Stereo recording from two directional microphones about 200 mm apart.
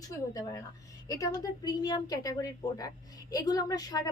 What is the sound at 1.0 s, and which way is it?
A woman's voice, 15° left (ahead or behind).